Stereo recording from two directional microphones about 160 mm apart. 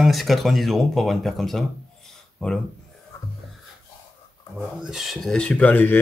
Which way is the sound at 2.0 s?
5° left (ahead or behind).